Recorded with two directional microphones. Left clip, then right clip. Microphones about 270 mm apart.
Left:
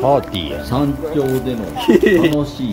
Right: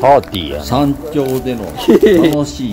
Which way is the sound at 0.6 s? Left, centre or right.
Right.